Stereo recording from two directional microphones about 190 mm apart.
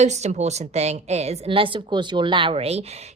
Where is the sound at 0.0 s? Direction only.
35° right (ahead or behind).